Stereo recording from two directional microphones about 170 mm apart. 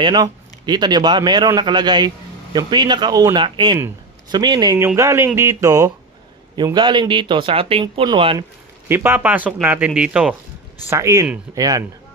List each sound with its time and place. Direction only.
0.0 s a man's voice: 25° right (ahead or behind)
8.8 s speech: 15° right (ahead or behind)
10.9 s a man's voice: 15° right (ahead or behind)